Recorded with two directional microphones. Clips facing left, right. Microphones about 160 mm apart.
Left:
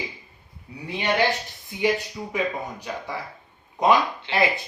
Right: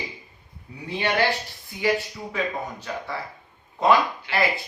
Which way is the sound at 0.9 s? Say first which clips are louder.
Left 1 dB; 15° left (ahead or behind).